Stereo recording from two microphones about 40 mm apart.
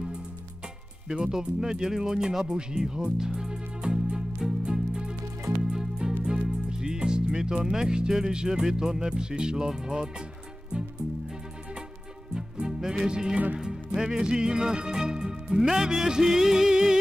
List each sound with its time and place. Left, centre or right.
1.0 s speech: centre
4.6 s music: centre
9.1 s speech: centre
12.4 s music: centre
13.6 s speech: centre